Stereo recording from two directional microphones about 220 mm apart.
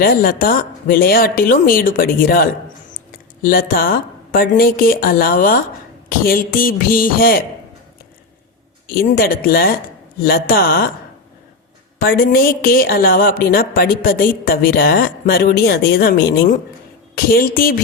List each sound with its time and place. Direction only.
0.0 s a woman's voice: 40° left (ahead or behind)
9.0 s a woman's voice: 40° left (ahead or behind)
11.9 s a woman's voice: 45° left (ahead or behind)